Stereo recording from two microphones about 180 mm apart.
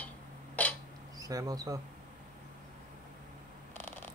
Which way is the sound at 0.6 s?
10° left (ahead or behind).